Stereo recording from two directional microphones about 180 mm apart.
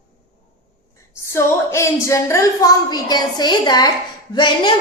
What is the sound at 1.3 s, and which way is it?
A woman's voice, 15° left (ahead or behind).